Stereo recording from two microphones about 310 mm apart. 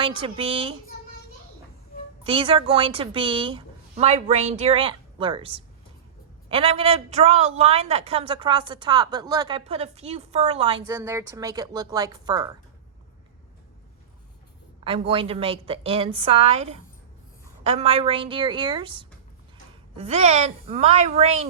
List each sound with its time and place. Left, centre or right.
0.0 s a woman's voice: centre
2.2 s a woman's voice: centre
14.8 s a woman's voice: centre